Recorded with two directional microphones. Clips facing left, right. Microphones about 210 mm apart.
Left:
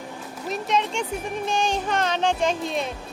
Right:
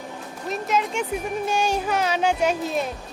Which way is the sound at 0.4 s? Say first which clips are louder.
Even; 5° right (ahead or behind).